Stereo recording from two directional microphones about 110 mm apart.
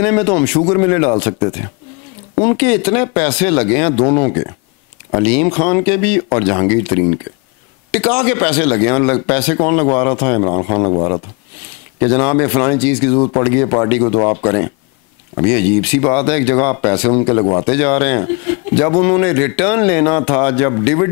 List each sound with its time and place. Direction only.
0.0 s speech: 15° left (ahead or behind)